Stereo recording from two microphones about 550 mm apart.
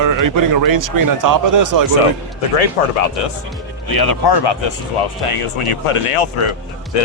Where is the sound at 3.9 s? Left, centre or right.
Left.